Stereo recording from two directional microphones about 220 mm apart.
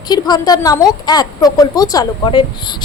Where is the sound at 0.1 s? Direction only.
20° left (ahead or behind).